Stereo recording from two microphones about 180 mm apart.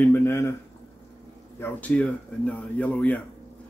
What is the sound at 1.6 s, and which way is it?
Speech, 10° left (ahead or behind).